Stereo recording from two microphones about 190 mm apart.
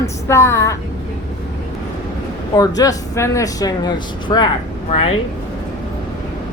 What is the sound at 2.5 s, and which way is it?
Speech, 20° left (ahead or behind).